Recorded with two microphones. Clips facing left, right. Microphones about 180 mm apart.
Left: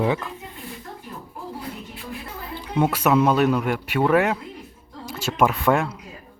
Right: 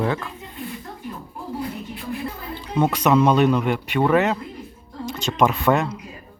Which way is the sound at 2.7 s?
5° left (ahead or behind).